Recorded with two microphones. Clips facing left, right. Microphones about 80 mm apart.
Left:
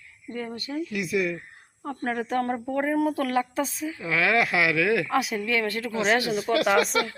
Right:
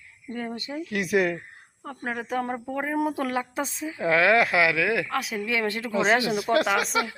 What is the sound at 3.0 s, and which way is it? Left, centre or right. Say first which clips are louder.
Speech: left 2 dB; right.